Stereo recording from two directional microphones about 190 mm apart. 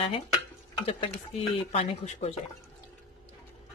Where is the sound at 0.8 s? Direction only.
30° left (ahead or behind).